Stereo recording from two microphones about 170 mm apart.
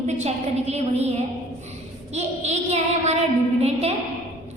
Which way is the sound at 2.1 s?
40° right (ahead or behind).